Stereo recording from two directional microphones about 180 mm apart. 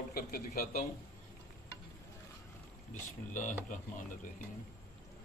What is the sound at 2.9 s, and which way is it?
Speech, 45° left (ahead or behind).